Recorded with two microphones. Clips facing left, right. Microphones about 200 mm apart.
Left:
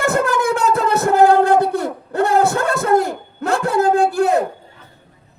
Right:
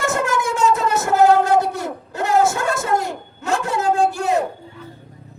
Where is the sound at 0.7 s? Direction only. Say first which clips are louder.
Left 3 dB; 55° left (ahead or behind).